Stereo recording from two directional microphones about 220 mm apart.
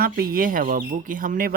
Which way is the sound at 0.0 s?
40° right (ahead or behind).